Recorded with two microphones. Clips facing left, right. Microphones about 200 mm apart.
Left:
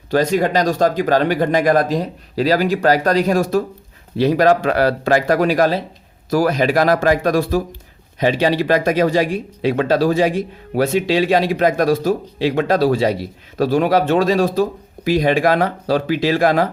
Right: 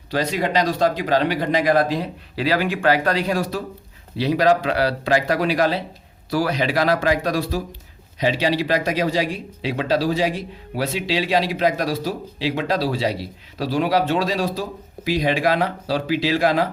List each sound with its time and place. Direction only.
0.1 s speech: 50° left (ahead or behind)